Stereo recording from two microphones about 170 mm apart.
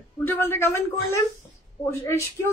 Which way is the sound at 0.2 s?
15° left (ahead or behind).